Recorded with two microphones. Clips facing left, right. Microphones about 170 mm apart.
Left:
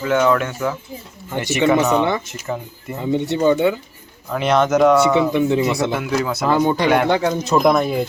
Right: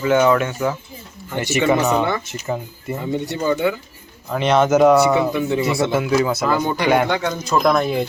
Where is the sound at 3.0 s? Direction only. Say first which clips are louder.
Left 6 dB; 20° left (ahead or behind).